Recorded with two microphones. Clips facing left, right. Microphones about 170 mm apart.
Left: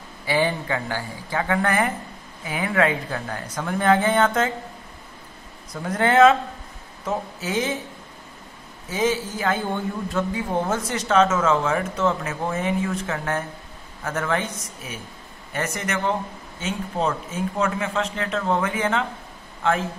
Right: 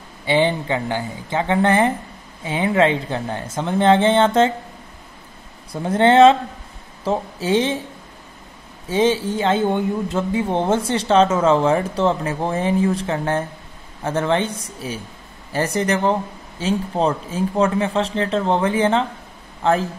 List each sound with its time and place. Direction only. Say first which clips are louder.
0.2 s speech: right 4 dB; 25° right (ahead or behind)
5.7 s speech: right 6 dB; 25° right (ahead or behind)
8.8 s speech: right 5 dB; 30° right (ahead or behind)